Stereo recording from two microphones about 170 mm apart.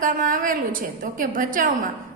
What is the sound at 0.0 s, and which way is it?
A woman's voice, 50° right (ahead or behind).